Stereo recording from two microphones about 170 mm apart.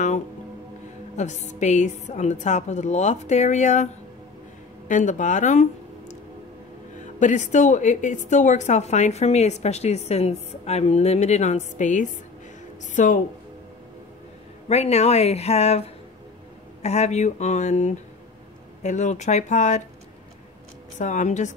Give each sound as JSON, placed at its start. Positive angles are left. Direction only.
{"t": 1.1, "sound": "a woman's voice", "side_deg": 45}
{"t": 7.2, "sound": "a woman's voice", "side_deg": 45}
{"t": 14.7, "sound": "a woman's voice", "side_deg": 40}
{"t": 21.0, "sound": "a woman's voice", "side_deg": 45}